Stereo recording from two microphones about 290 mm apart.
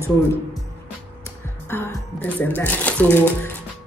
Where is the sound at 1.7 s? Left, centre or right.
Centre.